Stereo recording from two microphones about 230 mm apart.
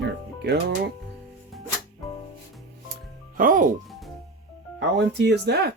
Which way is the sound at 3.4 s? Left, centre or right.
Right.